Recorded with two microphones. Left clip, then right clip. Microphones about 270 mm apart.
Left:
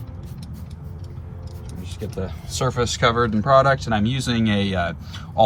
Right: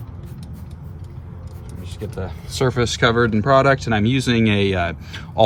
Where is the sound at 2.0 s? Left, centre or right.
Right.